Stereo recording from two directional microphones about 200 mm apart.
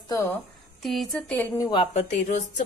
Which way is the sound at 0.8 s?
Centre (ahead or behind).